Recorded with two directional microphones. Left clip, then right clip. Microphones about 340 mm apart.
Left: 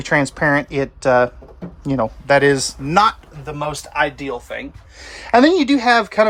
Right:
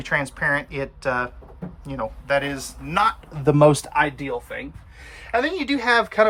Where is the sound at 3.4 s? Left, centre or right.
Centre.